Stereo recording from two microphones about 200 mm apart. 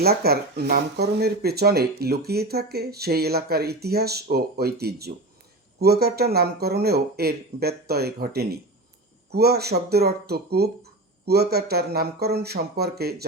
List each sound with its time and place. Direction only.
0.0 s speech: 50° right (ahead or behind)